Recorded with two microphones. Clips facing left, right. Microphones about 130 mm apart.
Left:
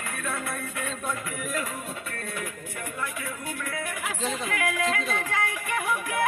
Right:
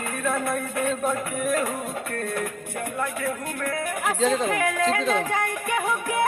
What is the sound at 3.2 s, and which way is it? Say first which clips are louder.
Music: right 6 dB; 45° right (ahead or behind).